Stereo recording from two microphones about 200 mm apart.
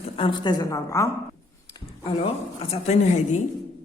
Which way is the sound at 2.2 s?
30° left (ahead or behind).